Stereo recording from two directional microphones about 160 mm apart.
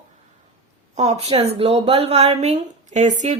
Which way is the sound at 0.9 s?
40° right (ahead or behind).